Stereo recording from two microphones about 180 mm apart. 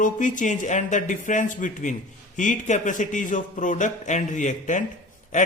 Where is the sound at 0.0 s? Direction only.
45° left (ahead or behind).